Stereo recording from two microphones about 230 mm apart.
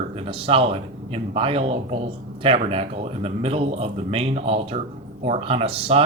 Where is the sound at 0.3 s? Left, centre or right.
Right.